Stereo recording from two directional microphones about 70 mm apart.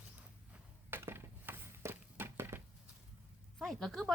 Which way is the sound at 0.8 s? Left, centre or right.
Right.